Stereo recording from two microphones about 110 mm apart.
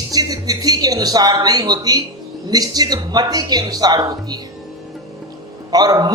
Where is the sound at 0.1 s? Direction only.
35° right (ahead or behind).